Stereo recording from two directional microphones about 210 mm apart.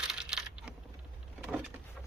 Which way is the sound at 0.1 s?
5° right (ahead or behind).